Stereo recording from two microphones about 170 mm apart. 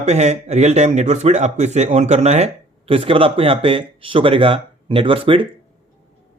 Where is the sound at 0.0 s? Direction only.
40° right (ahead or behind).